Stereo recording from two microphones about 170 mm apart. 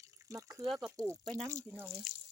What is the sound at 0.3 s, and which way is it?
Speech, 15° right (ahead or behind).